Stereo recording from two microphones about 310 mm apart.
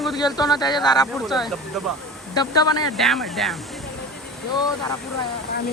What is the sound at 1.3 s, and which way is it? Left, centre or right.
Speech, centre.